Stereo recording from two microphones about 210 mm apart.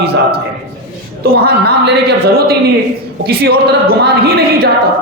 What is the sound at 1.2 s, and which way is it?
Speech, 50° right (ahead or behind).